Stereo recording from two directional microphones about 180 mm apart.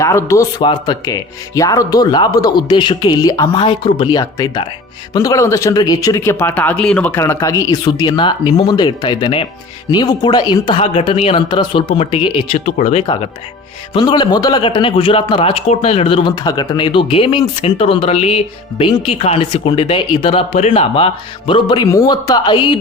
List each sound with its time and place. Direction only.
0.0 s speech: 15° left (ahead or behind)
0.6 s speech: 25° left (ahead or behind); by 13.0 s 45° left (ahead or behind)
13.0 s speech: 30° left (ahead or behind)